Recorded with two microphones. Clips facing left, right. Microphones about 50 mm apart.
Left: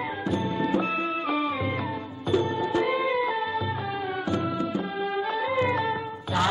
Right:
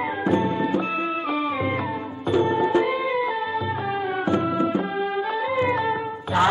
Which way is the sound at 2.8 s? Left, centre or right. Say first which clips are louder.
Right 2 dB; centre.